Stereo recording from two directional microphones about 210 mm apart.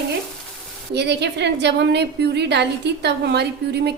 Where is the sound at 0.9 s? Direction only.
55° right (ahead or behind).